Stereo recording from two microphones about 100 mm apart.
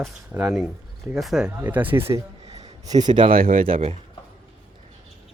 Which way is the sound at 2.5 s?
90° right.